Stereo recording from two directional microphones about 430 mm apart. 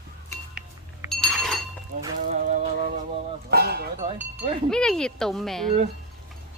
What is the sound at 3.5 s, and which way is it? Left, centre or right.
Cowbell, right.